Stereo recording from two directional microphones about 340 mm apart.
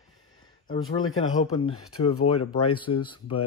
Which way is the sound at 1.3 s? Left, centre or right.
Left.